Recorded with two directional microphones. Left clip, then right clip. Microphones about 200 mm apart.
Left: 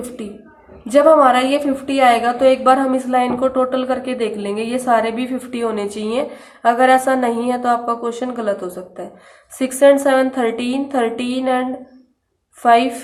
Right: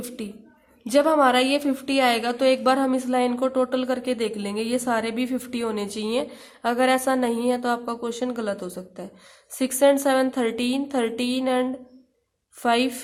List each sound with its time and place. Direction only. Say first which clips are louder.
0.9 s a woman's voice: left 8 dB; 30° right (ahead or behind)